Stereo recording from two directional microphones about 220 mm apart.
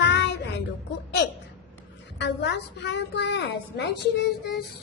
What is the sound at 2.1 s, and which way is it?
A woman's voice, 50° left (ahead or behind).